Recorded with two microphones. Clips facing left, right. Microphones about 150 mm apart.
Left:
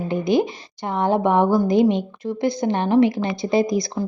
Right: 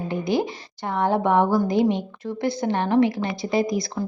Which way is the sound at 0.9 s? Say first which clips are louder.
Left 2 dB; 20° left (ahead or behind).